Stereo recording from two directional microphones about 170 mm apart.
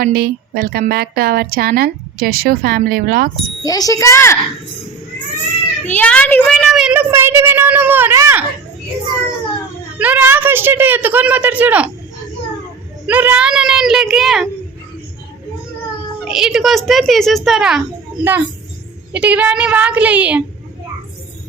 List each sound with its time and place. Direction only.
0.0 s a woman's voice: 60° right (ahead or behind)
3.6 s a child's voice: 20° left (ahead or behind)
5.8 s a woman's voice: 10° left (ahead or behind); by 8.4 s 15° right (ahead or behind)
10.0 s a woman's voice: 10° right (ahead or behind)
13.1 s a child's voice: 10° right (ahead or behind)
16.2 s a child's voice: centre (ahead or behind)